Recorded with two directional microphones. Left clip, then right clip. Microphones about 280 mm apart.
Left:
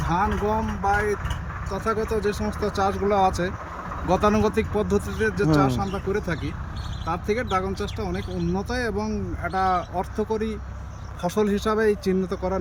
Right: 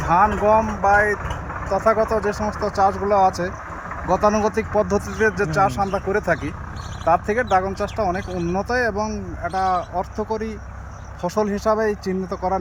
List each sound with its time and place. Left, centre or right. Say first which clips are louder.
0.1 s speech: right 8 dB; centre
8.3 s speech: right 4 dB; right
8.5 s speech: right 7 dB; centre